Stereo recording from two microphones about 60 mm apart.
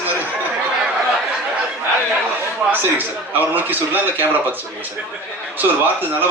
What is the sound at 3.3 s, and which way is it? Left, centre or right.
A man's voice, right.